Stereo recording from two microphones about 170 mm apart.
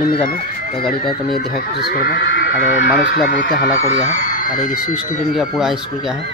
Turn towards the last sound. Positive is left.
turn(degrees=0)  # may be behind; listen again after turning